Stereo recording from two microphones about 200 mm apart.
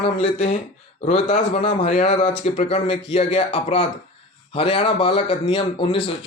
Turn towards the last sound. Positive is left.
turn(degrees=25)  # may be behind; listen again after turning